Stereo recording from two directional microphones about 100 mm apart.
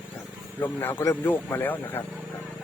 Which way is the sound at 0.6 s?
20° left (ahead or behind).